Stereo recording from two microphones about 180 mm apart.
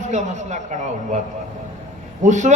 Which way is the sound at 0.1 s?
40° right (ahead or behind).